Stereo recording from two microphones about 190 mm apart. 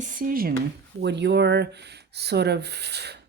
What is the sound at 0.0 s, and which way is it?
Speech, 45° right (ahead or behind).